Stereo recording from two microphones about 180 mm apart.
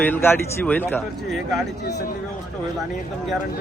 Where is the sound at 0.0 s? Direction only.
10° left (ahead or behind).